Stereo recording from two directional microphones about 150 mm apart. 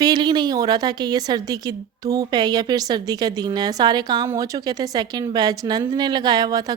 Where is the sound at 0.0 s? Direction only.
30° right (ahead or behind).